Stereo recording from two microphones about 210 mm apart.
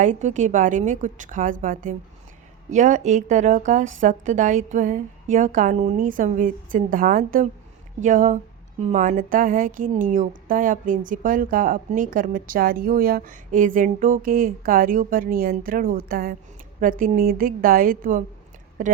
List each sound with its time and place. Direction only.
0.0 s a woman's voice: 35° right (ahead or behind)